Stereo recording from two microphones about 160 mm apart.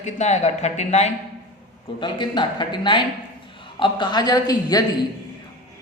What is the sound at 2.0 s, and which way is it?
Speech, 30° left (ahead or behind).